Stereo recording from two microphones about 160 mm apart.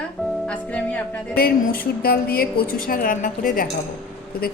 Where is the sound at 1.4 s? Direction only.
70° left (ahead or behind).